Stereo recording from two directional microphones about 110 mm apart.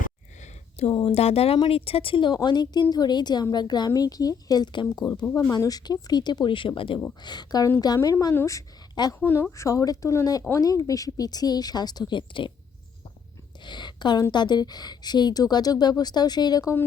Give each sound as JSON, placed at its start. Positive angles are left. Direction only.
{"t": 0.4, "sound": "a sound", "side_deg": 75}
{"t": 1.1, "sound": "a woman's voice", "side_deg": 65}
{"t": 5.2, "sound": "a woman's voice", "side_deg": 30}
{"t": 9.1, "sound": "speech", "side_deg": 20}
{"t": 13.6, "sound": "speech", "side_deg": 45}